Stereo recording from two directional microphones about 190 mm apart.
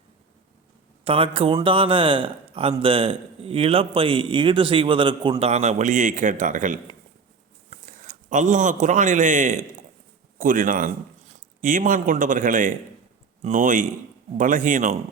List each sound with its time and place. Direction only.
1.0 s a man's voice: 30° right (ahead or behind)